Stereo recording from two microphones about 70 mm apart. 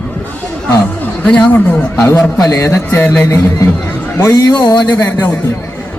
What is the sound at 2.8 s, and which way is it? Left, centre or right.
Music, left.